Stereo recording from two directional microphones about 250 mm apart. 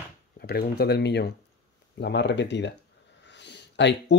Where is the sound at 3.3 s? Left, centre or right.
Left.